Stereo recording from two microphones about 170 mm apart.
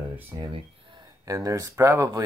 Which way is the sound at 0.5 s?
30° right (ahead or behind).